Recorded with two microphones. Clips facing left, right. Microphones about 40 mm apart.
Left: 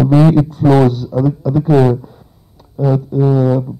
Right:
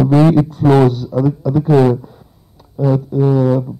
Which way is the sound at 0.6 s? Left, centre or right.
Right.